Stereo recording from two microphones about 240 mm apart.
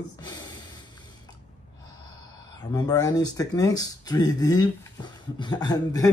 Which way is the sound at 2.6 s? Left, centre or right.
Centre.